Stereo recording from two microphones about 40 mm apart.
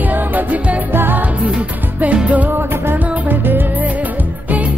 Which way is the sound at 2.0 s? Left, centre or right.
Right.